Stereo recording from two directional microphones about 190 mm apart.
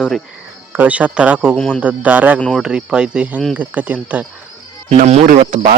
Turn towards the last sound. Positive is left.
turn(degrees=-40)  # may be behind; listen again after turning